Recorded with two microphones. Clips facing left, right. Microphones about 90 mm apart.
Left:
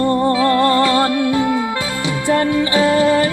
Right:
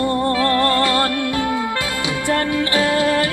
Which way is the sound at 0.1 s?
15° left (ahead or behind).